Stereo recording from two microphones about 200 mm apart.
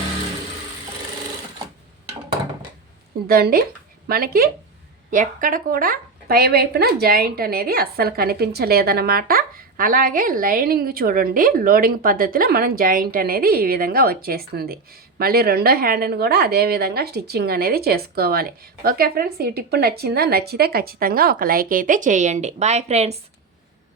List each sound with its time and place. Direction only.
3.2 s speech: 50° right (ahead or behind); by 23.2 s 30° right (ahead or behind)